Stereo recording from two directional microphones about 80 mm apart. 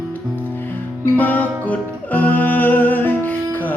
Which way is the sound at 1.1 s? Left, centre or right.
Left.